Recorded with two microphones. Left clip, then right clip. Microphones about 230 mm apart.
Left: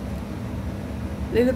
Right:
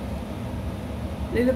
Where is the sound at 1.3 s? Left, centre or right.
Centre.